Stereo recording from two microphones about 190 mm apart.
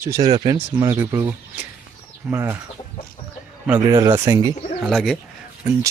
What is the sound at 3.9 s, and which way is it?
Speech, 20° right (ahead or behind).